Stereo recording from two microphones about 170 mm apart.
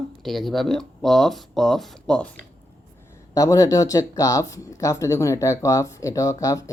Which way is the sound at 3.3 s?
20° left (ahead or behind).